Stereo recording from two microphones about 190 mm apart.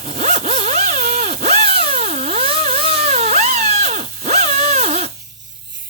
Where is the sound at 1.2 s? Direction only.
35° right (ahead or behind).